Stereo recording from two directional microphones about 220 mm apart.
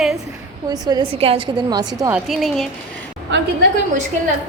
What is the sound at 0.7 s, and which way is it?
A woman's voice, 20° right (ahead or behind).